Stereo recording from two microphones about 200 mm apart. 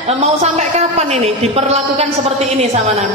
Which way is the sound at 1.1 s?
30° right (ahead or behind).